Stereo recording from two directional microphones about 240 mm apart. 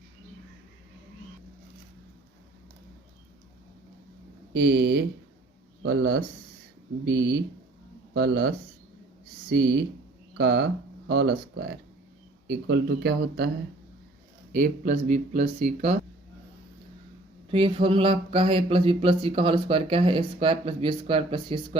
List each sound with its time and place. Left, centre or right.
4.5 s speech: right
14.5 s speech: right
17.5 s speech: right